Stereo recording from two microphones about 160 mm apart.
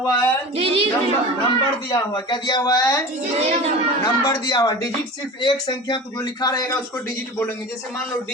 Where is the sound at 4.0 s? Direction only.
20° left (ahead or behind).